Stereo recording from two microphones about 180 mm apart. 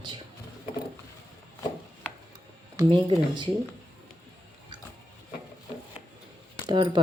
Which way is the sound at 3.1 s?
25° right (ahead or behind).